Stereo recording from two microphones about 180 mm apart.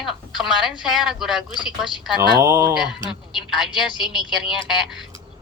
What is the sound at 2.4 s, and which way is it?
Speech, 15° right (ahead or behind).